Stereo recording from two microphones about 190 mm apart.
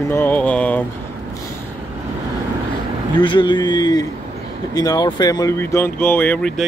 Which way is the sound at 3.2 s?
25° left (ahead or behind).